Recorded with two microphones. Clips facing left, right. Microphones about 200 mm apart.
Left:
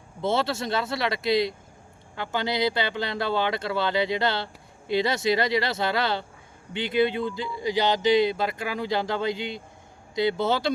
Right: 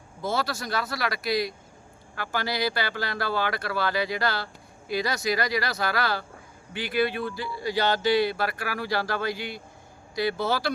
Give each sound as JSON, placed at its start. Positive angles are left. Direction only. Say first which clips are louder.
{"t": 0.2, "sound": "speech", "louder": "left 4 dB", "side_deg": 25}